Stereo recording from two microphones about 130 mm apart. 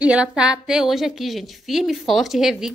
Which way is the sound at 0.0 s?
10° right (ahead or behind).